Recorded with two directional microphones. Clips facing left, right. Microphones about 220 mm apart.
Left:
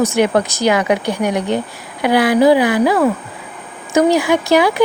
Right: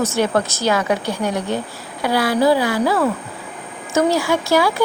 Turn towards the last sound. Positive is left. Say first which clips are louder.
# left 4 dB
turn(degrees=20)  # may be behind; listen again after turning